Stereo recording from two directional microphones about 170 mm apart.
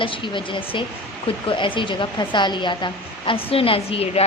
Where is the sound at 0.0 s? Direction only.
30° left (ahead or behind).